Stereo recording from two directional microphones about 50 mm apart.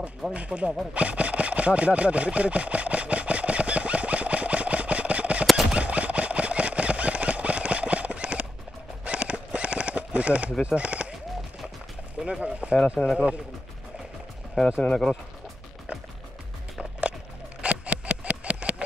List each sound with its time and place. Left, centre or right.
0.3 s speech: right
0.9 s a sound: right
10.6 s speech: right
12.3 s speech: right
13.0 s speech: centre
14.8 s speech: centre
17.6 s a sound: right